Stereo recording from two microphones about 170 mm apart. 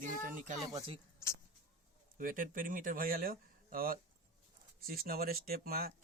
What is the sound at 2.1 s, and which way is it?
A man's voice, 55° right (ahead or behind).